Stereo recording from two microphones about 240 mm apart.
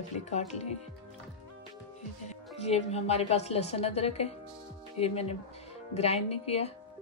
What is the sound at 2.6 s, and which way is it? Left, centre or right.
Speech, left.